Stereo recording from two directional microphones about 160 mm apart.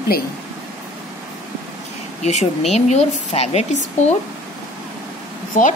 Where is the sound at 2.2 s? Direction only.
45° left (ahead or behind).